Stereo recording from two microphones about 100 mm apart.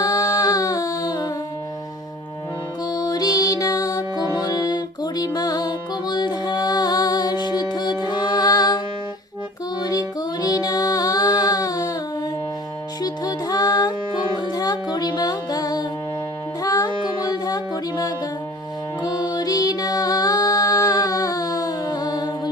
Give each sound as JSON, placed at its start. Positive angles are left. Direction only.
{"t": 0.0, "sound": "music", "side_deg": 40}
{"t": 2.8, "sound": "music", "side_deg": 45}
{"t": 9.8, "sound": "music", "side_deg": 40}
{"t": 13.0, "sound": "music", "side_deg": 40}
{"t": 16.6, "sound": "child singing", "side_deg": 40}
{"t": 19.0, "sound": "music", "side_deg": 45}